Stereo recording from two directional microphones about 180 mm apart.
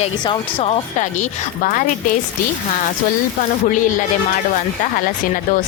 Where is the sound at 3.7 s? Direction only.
45° left (ahead or behind).